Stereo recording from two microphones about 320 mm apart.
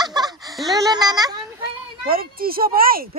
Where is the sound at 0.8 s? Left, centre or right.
Centre.